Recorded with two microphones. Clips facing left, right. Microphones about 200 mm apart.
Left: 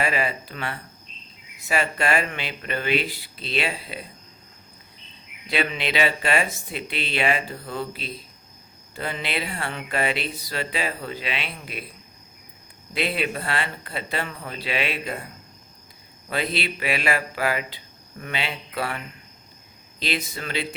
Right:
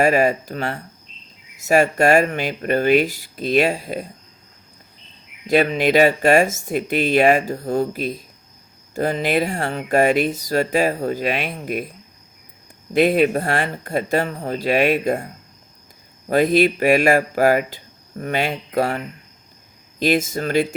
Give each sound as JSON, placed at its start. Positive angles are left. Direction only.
{"t": 0.0, "sound": "speech", "side_deg": -45}
{"t": 5.5, "sound": "speech", "side_deg": -45}
{"t": 12.9, "sound": "speech", "side_deg": -45}
{"t": 16.3, "sound": "speech", "side_deg": -45}